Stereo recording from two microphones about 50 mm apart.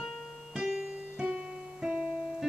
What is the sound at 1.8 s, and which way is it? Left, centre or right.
Music, right.